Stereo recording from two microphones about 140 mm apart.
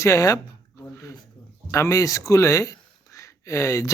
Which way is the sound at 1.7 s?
25° left (ahead or behind).